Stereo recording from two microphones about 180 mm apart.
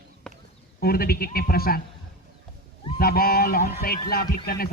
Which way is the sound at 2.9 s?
55° left (ahead or behind).